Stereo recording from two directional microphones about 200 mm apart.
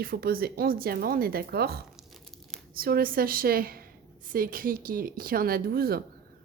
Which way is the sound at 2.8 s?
50° right (ahead or behind).